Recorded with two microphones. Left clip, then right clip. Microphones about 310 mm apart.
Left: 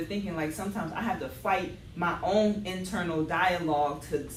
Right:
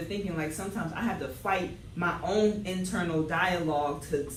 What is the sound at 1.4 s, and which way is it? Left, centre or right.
Speech, left.